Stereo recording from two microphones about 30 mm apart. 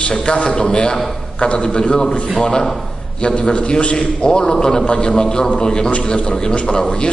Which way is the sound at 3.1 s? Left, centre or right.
Left.